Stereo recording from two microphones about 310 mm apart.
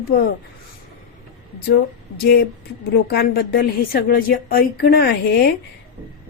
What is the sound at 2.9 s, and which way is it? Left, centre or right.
A woman's voice, left.